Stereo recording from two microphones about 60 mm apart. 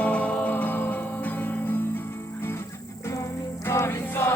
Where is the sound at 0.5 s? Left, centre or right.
Left.